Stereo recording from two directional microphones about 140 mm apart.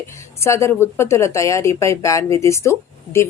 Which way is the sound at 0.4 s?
20° left (ahead or behind).